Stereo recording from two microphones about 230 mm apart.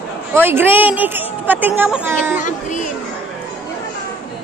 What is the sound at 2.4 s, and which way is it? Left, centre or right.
Speech, left.